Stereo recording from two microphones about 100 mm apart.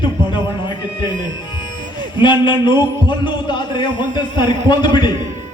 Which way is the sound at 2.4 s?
50° left (ahead or behind).